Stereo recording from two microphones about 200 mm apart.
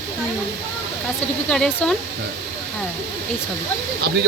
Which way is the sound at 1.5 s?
5° left (ahead or behind).